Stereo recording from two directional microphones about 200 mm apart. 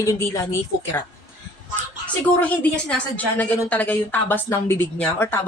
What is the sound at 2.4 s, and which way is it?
A woman's voice, 5° left (ahead or behind).